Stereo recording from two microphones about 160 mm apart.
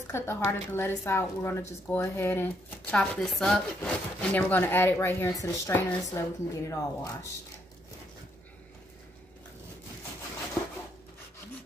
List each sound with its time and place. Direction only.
0.0 s a woman's voice: 15° left (ahead or behind)